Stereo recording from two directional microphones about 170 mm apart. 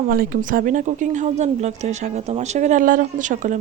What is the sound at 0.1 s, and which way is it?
Speech, 55° right (ahead or behind).